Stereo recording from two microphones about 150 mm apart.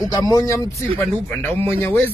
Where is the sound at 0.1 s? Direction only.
25° left (ahead or behind).